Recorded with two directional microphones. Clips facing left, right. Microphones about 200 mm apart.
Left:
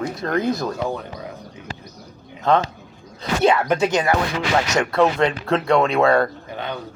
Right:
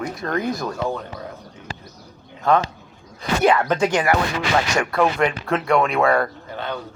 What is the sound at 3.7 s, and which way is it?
Speech, 20° left (ahead or behind).